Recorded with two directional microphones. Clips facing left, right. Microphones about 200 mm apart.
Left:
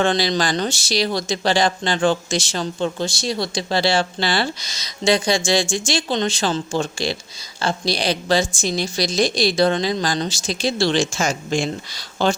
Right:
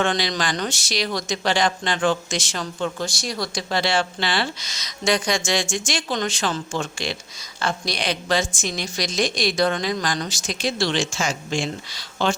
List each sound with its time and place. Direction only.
0.0 s speech: 30° left (ahead or behind)